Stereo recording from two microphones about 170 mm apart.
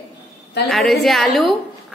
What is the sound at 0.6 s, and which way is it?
Speech, centre (ahead or behind).